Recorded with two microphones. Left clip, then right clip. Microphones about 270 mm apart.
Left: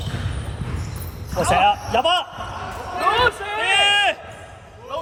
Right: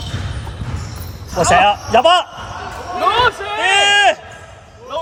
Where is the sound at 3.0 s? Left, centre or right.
Right.